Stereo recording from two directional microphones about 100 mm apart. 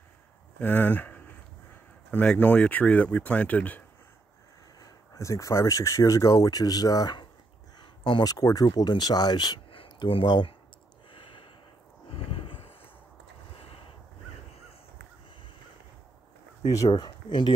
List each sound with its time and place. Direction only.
0.6 s speech: 20° left (ahead or behind)
4.7 s speech: 35° left (ahead or behind)
9.7 s a sound: 55° left (ahead or behind)
11.1 s gasp: 60° left (ahead or behind)
16.7 s speech: 40° left (ahead or behind)